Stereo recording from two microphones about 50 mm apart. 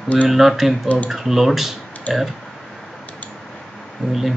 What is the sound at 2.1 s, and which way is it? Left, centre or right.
Speech, left.